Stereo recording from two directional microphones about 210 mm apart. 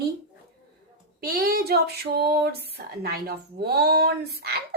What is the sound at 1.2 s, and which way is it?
A woman's voice, 45° right (ahead or behind).